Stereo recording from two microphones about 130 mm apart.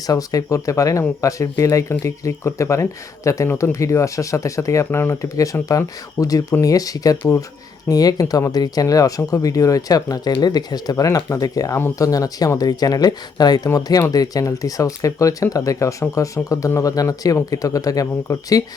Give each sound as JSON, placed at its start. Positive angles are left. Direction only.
{"t": 0.1, "sound": "speech", "side_deg": 25}